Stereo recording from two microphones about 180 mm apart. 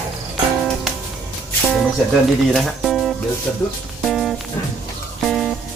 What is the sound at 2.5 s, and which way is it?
Speech, centre (ahead or behind).